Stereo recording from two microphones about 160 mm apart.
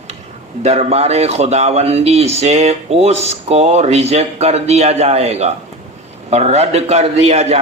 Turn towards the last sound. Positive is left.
turn(degrees=-40)  # may be behind; listen again after turning